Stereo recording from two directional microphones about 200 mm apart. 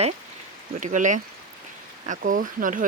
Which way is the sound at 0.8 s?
40° right (ahead or behind).